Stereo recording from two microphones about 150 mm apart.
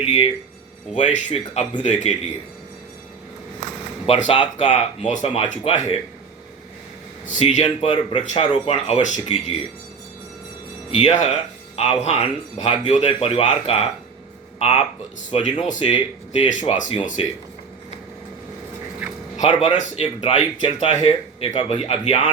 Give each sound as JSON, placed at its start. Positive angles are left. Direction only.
{"t": 0.0, "sound": "speech", "side_deg": 40}
{"t": 0.9, "sound": "speech", "side_deg": 55}
{"t": 4.0, "sound": "speech", "side_deg": 45}
{"t": 7.3, "sound": "speech", "side_deg": 50}
{"t": 10.9, "sound": "speech", "side_deg": 50}
{"t": 15.4, "sound": "speech", "side_deg": 55}
{"t": 17.2, "sound": "speech", "side_deg": 40}
{"t": 19.4, "sound": "speech", "side_deg": 50}